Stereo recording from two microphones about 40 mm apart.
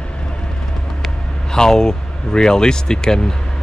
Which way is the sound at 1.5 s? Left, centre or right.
Centre.